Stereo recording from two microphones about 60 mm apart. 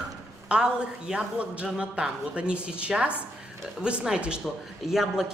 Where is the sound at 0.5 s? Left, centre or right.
Centre.